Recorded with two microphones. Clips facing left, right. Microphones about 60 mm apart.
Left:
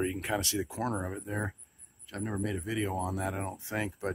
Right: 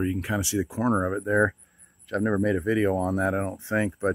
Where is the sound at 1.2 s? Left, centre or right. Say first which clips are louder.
Right 14 dB; right.